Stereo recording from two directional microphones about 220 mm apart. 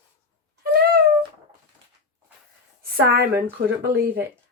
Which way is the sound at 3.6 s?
45° right (ahead or behind).